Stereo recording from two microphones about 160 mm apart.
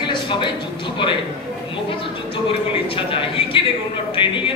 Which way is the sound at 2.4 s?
35° left (ahead or behind).